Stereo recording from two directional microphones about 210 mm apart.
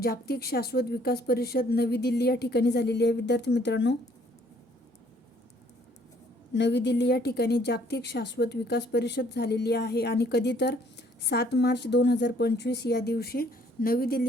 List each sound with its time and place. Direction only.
0.0 s a woman's voice: 50° left (ahead or behind)
6.5 s a woman's voice: 55° left (ahead or behind)